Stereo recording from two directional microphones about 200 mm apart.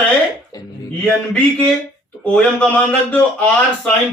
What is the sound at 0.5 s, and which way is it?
Music, 20° left (ahead or behind).